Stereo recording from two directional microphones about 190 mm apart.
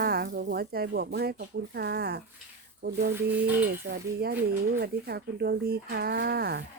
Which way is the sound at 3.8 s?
55° right (ahead or behind).